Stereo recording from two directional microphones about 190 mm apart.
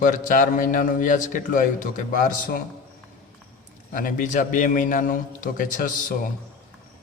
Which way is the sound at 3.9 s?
45° left (ahead or behind).